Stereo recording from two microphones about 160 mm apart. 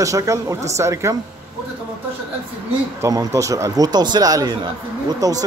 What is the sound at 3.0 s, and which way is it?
Speech, 20° right (ahead or behind).